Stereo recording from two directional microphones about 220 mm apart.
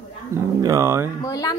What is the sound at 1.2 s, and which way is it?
Speech, 15° left (ahead or behind).